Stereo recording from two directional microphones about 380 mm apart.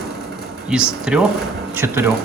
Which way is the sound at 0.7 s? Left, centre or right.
Centre.